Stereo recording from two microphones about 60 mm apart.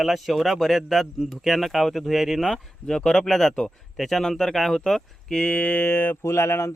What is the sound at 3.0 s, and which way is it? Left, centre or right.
Speech, centre.